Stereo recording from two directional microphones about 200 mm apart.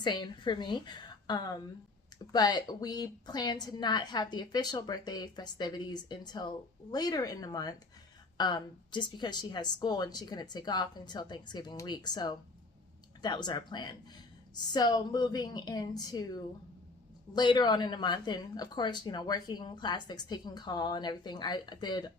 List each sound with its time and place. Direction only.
0.0 s speech: 20° left (ahead or behind)